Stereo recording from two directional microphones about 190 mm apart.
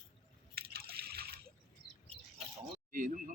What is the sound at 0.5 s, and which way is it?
Liquid, 55° right (ahead or behind).